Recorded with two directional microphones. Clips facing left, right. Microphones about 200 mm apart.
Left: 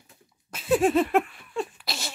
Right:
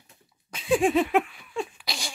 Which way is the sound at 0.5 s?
5° left (ahead or behind).